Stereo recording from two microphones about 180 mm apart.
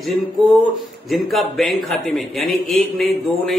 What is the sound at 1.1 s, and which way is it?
A man's voice, centre (ahead or behind).